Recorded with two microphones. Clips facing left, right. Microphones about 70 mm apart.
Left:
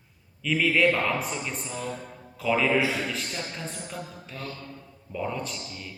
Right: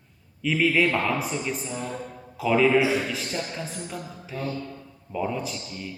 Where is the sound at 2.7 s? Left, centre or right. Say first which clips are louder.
Right 4 dB; right.